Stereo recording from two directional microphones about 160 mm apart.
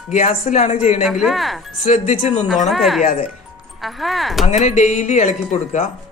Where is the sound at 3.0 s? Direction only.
55° left (ahead or behind).